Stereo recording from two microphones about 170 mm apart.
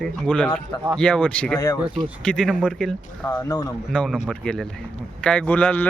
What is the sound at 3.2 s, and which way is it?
Speech, 20° left (ahead or behind).